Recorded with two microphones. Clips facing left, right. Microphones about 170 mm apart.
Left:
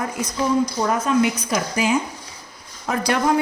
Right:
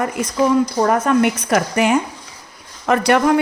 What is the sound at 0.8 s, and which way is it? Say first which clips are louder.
A woman's voice: right 4 dB; 60° right (ahead or behind).